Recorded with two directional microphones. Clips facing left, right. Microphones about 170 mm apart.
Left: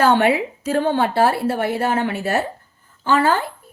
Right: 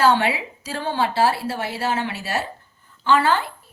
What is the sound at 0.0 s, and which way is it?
A woman's voice, 50° left (ahead or behind).